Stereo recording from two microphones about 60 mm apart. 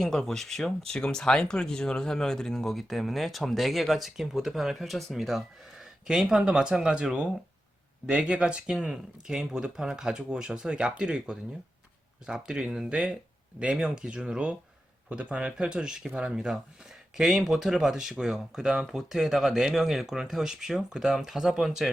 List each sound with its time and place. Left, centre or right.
0.0 s speech: centre